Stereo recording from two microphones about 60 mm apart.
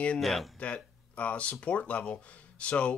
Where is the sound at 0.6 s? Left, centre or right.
Left.